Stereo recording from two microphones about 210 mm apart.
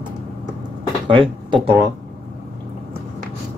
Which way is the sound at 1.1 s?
25° right (ahead or behind).